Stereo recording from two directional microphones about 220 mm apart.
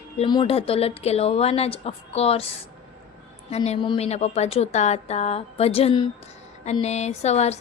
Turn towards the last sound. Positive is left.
turn(degrees=30)  # may be behind; listen again after turning